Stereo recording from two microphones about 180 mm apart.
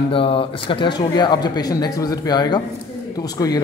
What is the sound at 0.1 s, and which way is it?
Speech, 30° left (ahead or behind).